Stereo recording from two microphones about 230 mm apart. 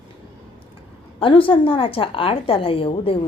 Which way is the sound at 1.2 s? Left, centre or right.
Left.